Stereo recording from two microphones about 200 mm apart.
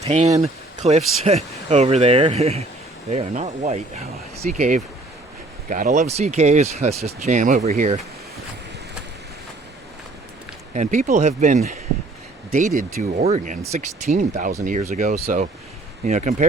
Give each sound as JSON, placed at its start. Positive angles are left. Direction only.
{"t": 0.0, "sound": "speech", "side_deg": -35}
{"t": 10.8, "sound": "speech", "side_deg": -35}